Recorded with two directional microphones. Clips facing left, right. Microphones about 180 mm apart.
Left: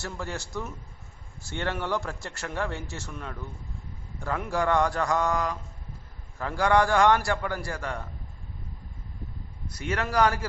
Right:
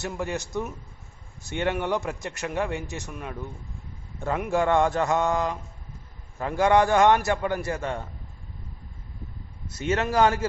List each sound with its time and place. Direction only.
0.0 s a man's voice: 20° right (ahead or behind)
4.2 s a man's voice: 25° right (ahead or behind)
9.6 s a man's voice: 25° right (ahead or behind)